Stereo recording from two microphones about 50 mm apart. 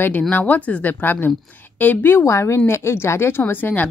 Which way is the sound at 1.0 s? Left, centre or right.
Left.